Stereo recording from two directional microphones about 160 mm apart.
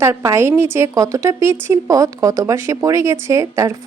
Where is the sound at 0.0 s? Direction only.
20° right (ahead or behind).